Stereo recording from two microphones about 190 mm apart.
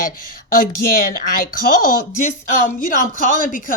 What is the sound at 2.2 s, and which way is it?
Speech, 40° left (ahead or behind).